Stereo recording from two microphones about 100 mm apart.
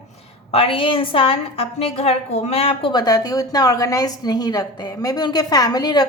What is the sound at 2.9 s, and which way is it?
A woman's voice, 40° left (ahead or behind).